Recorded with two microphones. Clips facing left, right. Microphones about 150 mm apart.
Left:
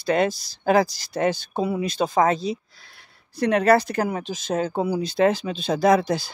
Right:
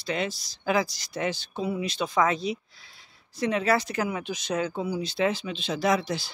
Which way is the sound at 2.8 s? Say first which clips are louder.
Left 3 dB; 60° left (ahead or behind).